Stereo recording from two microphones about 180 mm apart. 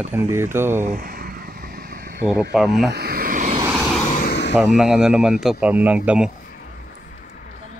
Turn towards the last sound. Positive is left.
turn(degrees=-5)  # may be behind; listen again after turning